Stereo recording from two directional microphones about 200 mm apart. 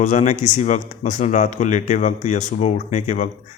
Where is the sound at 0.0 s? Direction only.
40° left (ahead or behind).